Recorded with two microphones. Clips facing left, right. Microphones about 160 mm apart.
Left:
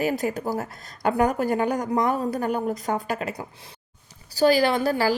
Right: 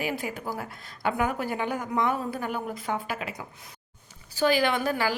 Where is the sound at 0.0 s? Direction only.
40° left (ahead or behind).